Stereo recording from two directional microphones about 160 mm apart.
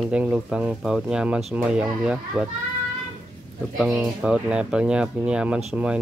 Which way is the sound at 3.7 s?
Centre (ahead or behind).